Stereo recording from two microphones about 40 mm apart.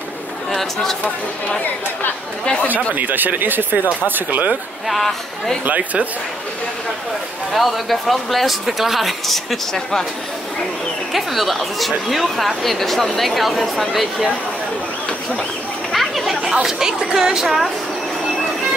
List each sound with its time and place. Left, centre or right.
0.6 s speech: centre
2.4 s speech: left
2.7 s speech: right
4.8 s speech: centre
5.7 s speech: right
7.5 s speech: centre
9.8 s speech: centre
11.1 s speech: centre
15.9 s chatter: centre
17.0 s a sound: centre